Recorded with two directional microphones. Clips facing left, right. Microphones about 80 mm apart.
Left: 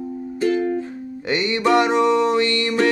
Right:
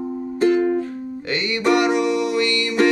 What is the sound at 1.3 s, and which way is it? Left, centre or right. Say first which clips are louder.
Music: left 1 dB; left.